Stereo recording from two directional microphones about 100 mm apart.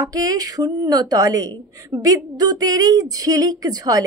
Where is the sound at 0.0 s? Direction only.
40° right (ahead or behind).